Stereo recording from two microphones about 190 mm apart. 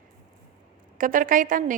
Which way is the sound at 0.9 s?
45° right (ahead or behind).